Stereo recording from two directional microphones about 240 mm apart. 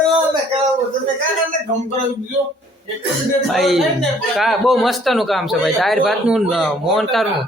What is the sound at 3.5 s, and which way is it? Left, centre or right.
A man's voice, centre.